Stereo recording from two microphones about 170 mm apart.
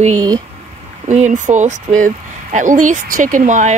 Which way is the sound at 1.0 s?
45° right (ahead or behind).